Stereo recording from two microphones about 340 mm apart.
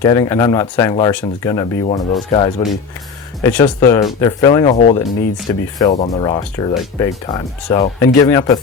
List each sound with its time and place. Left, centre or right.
0.0 s speech: centre
3.4 s speech: centre
4.9 s speech: centre
5.8 s speech: centre